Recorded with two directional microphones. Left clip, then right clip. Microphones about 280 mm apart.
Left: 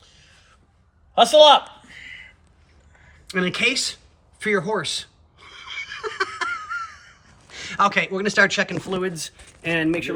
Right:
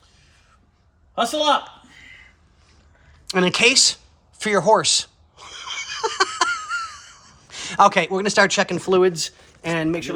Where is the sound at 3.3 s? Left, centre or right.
Centre.